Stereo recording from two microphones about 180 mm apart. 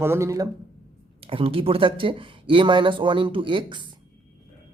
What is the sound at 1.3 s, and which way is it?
Speech, 30° right (ahead or behind).